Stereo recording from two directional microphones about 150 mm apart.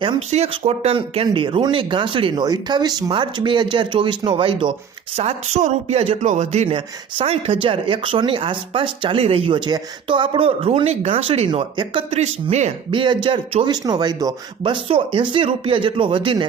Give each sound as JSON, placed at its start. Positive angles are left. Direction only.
{"t": 0.3, "sound": "a man's voice", "side_deg": -45}
{"t": 5.1, "sound": "a man's voice", "side_deg": -50}
{"t": 12.1, "sound": "speech", "side_deg": -50}
{"t": 12.9, "sound": "a man's voice", "side_deg": -30}